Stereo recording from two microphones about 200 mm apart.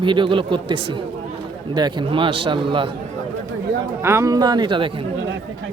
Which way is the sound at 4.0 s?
15° right (ahead or behind).